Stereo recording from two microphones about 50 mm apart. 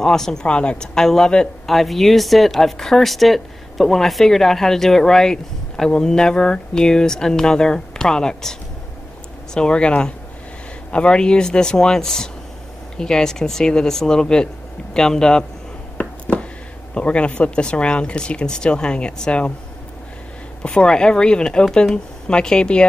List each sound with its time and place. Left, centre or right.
0.0 s speech: centre
0.5 s speech: left
0.9 s speech: centre
1.7 s speech: centre
16.9 s speech: left
20.6 s speech: centre